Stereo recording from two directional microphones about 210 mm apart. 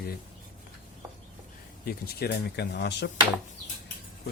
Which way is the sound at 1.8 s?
50° left (ahead or behind).